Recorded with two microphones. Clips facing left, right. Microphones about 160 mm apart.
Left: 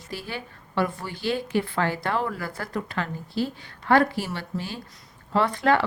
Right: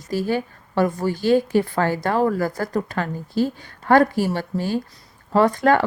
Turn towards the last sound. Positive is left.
turn(degrees=-45)  # may be behind; listen again after turning